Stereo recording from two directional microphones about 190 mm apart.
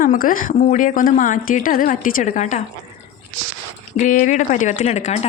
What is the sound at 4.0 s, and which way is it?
Speech, 40° left (ahead or behind).